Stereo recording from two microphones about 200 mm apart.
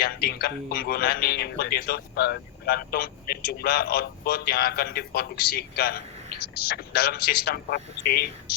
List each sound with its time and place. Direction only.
0.0 s a man's voice: 50° left (ahead or behind)